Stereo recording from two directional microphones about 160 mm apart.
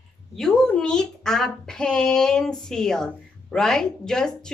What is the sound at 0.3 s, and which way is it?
A woman's voice, 5° left (ahead or behind).